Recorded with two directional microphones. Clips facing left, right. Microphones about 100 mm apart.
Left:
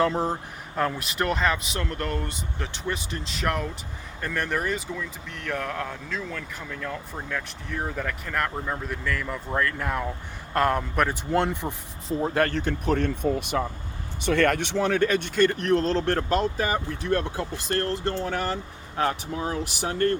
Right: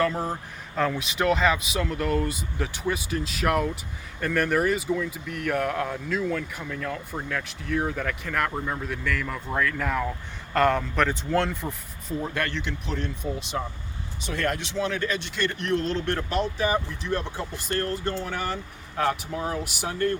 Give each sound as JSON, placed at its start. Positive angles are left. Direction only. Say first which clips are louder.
{"t": 0.0, "sound": "speech", "louder": "left 2 dB", "side_deg": 20}
{"t": 0.8, "sound": "a man's voice", "louder": "right 1 dB", "side_deg": 5}
{"t": 12.2, "sound": "speech", "louder": "left 7 dB", "side_deg": 35}
{"t": 17.0, "sound": "speech", "louder": "left 6 dB", "side_deg": 50}
{"t": 17.7, "sound": "speech", "louder": "left 1 dB", "side_deg": 30}
{"t": 19.9, "sound": "speech", "louder": "left 2 dB", "side_deg": 50}